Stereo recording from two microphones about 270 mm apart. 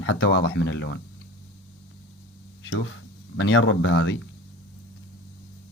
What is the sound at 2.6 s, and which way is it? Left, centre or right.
Speech, left.